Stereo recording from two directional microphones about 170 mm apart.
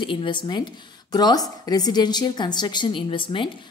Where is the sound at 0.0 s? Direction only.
30° left (ahead or behind).